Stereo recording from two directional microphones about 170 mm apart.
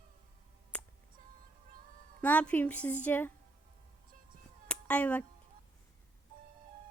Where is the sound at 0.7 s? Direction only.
5° left (ahead or behind).